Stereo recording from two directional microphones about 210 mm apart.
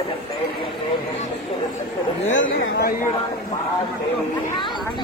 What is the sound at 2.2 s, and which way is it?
Speech, 35° left (ahead or behind).